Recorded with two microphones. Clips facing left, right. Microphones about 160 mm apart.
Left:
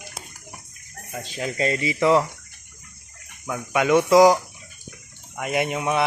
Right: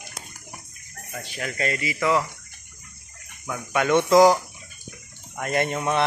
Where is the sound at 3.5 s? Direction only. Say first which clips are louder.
Left 2 dB; 10° left (ahead or behind).